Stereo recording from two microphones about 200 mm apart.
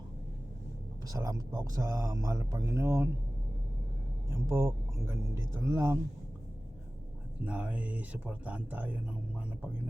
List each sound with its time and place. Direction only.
1.0 s speech: 15° right (ahead or behind)
4.3 s speech: 15° right (ahead or behind)
7.4 s speech: 5° right (ahead or behind)